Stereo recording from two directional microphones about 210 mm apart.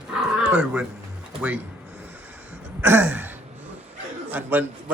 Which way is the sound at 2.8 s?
10° right (ahead or behind).